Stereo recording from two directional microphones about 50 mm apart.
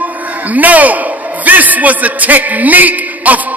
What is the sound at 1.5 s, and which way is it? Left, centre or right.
A man's voice, right.